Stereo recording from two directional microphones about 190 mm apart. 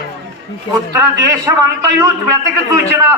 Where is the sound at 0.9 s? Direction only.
20° right (ahead or behind).